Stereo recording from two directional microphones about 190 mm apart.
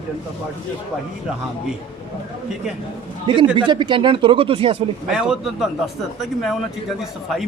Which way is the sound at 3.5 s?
25° right (ahead or behind).